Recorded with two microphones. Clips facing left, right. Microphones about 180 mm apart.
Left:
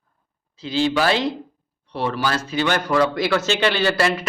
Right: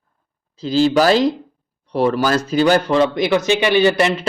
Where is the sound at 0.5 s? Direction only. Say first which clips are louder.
Right 6 dB; 40° right (ahead or behind).